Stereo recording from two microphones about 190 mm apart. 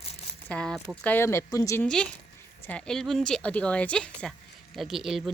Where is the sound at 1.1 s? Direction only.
15° left (ahead or behind).